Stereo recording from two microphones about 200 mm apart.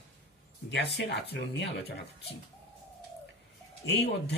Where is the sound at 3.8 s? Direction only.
55° left (ahead or behind).